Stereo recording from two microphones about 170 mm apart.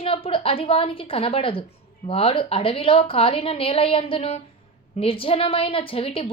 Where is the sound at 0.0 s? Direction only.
30° left (ahead or behind).